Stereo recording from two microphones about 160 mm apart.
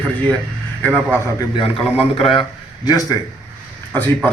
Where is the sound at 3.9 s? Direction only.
10° left (ahead or behind).